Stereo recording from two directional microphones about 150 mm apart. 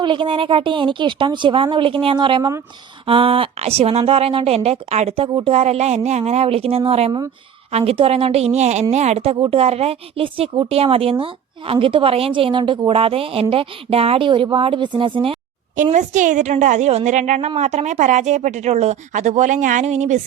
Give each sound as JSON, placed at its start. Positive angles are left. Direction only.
{"t": 0.0, "sound": "a woman's voice", "side_deg": -35}
{"t": 15.7, "sound": "speech", "side_deg": -55}